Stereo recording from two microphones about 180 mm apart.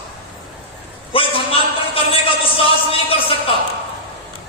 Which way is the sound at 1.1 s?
30° left (ahead or behind).